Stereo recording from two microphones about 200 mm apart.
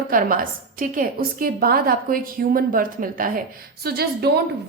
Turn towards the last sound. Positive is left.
turn(degrees=-50)  # may be behind; listen again after turning